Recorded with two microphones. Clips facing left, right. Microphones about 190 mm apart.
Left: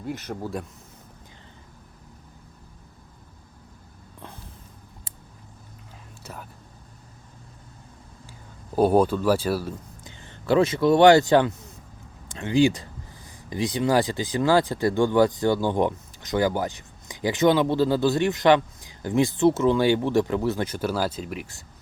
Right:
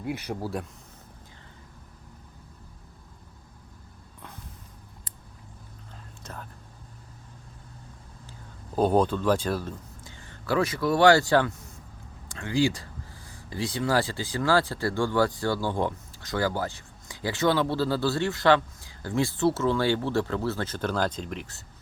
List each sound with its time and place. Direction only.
0.0 s speech: 10° right (ahead or behind)
6.2 s whispering: 10° left (ahead or behind)
8.7 s speech: 10° left (ahead or behind)
10.0 s speech: 20° left (ahead or behind)